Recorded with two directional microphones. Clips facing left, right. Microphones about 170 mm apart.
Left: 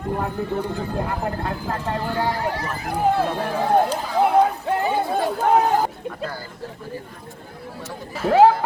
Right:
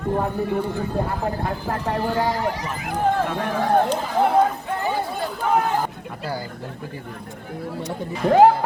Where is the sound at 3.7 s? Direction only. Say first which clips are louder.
Left 1 dB; 10° left (ahead or behind).